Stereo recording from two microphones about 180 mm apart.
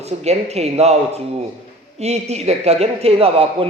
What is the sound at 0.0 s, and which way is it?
Speech, 35° right (ahead or behind).